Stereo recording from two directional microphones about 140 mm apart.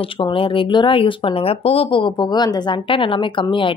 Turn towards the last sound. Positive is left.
turn(degrees=35)  # may be behind; listen again after turning